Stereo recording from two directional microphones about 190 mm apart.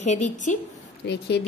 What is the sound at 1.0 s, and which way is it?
Speech, 65° left (ahead or behind).